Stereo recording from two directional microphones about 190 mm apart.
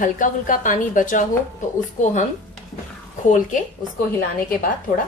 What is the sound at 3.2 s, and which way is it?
Speech, 40° left (ahead or behind).